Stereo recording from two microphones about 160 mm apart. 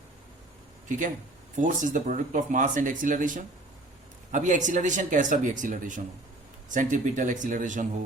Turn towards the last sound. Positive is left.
turn(degrees=-55)  # may be behind; listen again after turning